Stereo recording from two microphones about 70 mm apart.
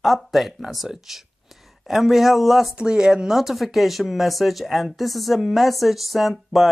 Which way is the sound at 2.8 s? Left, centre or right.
Centre.